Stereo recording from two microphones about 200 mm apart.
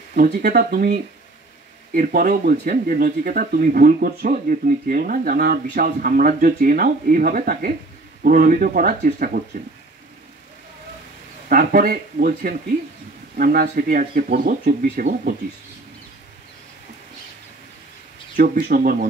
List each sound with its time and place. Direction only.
0.1 s speech: 45° right (ahead or behind)
2.0 s speech: 45° right (ahead or behind)
11.4 s speech: 45° right (ahead or behind)
18.3 s speech: 45° right (ahead or behind)